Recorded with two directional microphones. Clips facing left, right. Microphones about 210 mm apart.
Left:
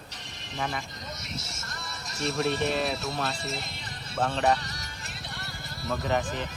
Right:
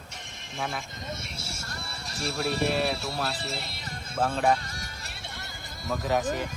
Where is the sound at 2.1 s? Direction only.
30° right (ahead or behind).